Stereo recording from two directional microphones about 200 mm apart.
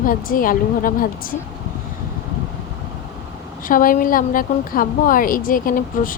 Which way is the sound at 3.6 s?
45° left (ahead or behind).